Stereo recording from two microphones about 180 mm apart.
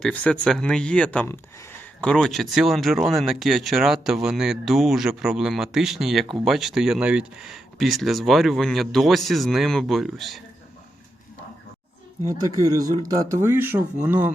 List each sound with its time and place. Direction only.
0.0 s speech: 5° left (ahead or behind)
12.3 s speech: 20° right (ahead or behind)